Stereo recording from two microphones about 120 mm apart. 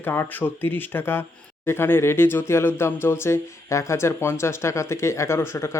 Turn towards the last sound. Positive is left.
turn(degrees=25)  # may be behind; listen again after turning